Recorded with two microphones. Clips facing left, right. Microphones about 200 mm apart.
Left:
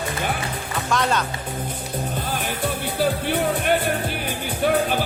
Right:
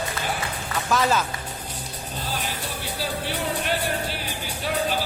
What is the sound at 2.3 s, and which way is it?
Music, 55° left (ahead or behind).